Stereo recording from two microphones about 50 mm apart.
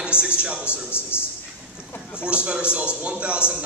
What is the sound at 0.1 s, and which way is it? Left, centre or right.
A man's voice, left.